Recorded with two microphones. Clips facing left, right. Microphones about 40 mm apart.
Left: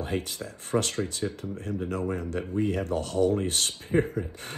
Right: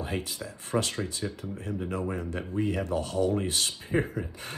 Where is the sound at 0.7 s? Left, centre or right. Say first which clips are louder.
Left 2 dB; left.